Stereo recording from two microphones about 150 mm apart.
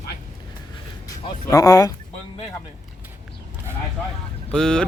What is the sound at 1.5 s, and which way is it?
Speech, 25° left (ahead or behind).